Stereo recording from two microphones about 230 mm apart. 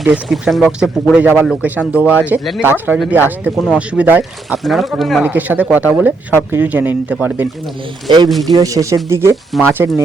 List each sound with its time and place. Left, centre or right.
0.0 s speech: centre
8.1 s speech: centre
9.3 s speech: centre
9.6 s speech: centre